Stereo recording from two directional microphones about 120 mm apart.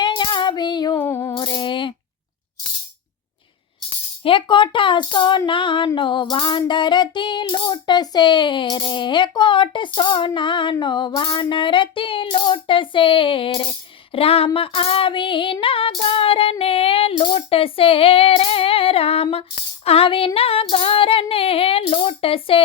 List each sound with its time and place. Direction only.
0.0 s child singing: 40° left (ahead or behind)
0.9 s music: 20° left (ahead or behind)
1.4 s coin: 45° left (ahead or behind)
4.2 s female singing: 45° left (ahead or behind)